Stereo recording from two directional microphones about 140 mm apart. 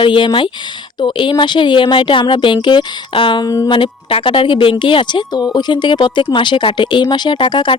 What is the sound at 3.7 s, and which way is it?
Speech, 40° left (ahead or behind).